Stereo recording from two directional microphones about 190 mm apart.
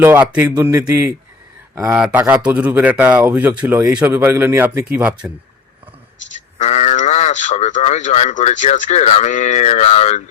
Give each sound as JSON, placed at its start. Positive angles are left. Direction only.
{"t": 0.0, "sound": "speech", "side_deg": -10}
{"t": 6.6, "sound": "speech", "side_deg": 35}